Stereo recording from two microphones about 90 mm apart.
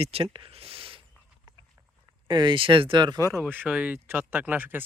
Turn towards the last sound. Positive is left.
turn(degrees=-20)  # may be behind; listen again after turning